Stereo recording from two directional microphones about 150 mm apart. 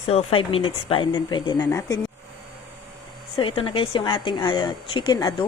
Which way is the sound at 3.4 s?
35° left (ahead or behind).